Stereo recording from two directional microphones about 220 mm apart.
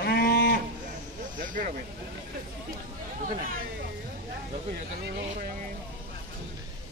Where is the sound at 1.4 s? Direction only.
35° right (ahead or behind).